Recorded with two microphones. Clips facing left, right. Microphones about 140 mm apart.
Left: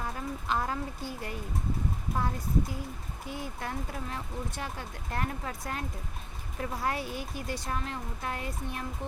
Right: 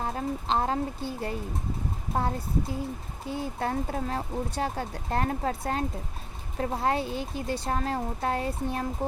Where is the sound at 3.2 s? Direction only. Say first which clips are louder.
Right 7 dB; 30° right (ahead or behind).